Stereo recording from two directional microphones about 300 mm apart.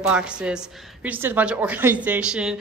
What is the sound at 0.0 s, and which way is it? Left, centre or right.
A woman's voice, centre.